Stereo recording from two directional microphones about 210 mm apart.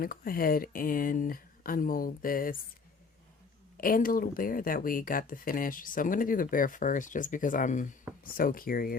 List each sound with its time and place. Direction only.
0.0 s speech: 45° left (ahead or behind)
3.8 s speech: 40° left (ahead or behind)